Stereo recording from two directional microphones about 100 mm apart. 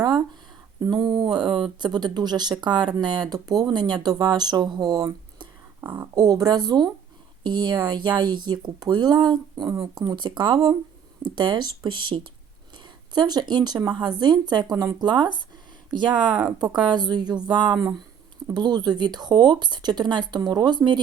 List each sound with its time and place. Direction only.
0.8 s speech: 40° right (ahead or behind)
5.4 s a sound: 50° right (ahead or behind)
6.1 s speech: 40° right (ahead or behind)
9.6 s speech: 30° right (ahead or behind)
10.0 s speech: 45° right (ahead or behind)
10.5 s speech: 35° right (ahead or behind)
11.2 s speech: 50° right (ahead or behind)
12.7 s speech: 45° right (ahead or behind)